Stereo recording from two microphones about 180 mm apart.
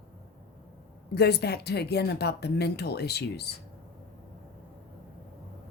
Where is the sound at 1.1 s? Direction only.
65° left (ahead or behind).